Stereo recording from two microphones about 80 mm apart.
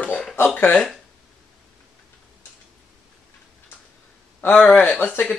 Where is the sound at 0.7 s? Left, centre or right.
Centre.